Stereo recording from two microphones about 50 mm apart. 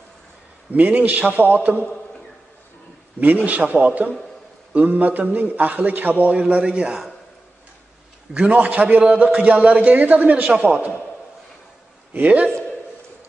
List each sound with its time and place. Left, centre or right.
0.7 s a man's voice: right
3.2 s a man's voice: right
8.3 s a man's voice: right
12.1 s a man's voice: right